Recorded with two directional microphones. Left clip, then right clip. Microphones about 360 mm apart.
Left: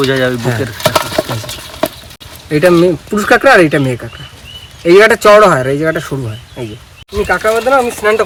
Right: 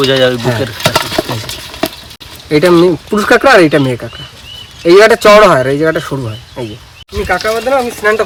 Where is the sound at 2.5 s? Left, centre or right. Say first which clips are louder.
Right 1 dB; centre.